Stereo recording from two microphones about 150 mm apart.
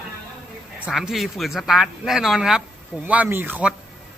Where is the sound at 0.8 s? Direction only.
5° right (ahead or behind).